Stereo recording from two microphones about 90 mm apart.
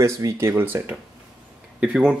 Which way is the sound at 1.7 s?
10° right (ahead or behind).